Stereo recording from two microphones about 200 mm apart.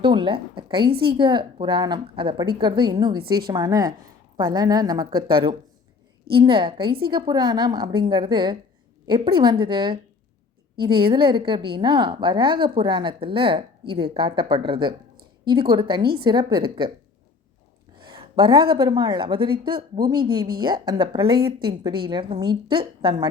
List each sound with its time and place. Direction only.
0.0 s a woman's voice: 25° right (ahead or behind)
0.9 s a woman's voice: 50° right (ahead or behind)
1.1 s a woman's voice: 25° right (ahead or behind)
3.2 s a woman's voice: 50° right (ahead or behind)
3.4 s a woman's voice: 20° right (ahead or behind)
18.1 s a woman's voice: 25° right (ahead or behind)
21.3 s a woman's voice: 50° right (ahead or behind)
22.0 s a woman's voice: 25° right (ahead or behind)